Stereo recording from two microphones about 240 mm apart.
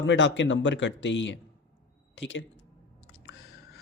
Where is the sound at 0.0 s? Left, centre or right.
Left.